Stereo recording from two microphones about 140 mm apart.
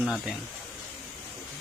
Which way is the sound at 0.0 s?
5° right (ahead or behind).